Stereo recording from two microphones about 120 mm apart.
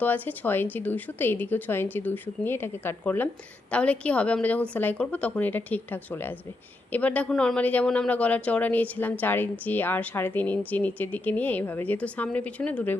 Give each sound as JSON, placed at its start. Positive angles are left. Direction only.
{"t": 0.0, "sound": "speech", "side_deg": 15}